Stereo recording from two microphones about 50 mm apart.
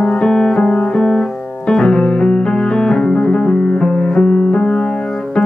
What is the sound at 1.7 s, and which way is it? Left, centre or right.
Piano, centre.